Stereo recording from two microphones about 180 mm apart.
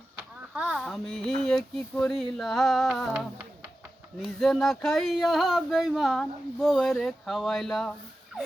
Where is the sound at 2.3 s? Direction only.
Centre (ahead or behind).